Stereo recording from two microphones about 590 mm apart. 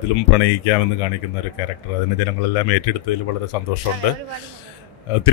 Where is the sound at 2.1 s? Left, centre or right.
Left.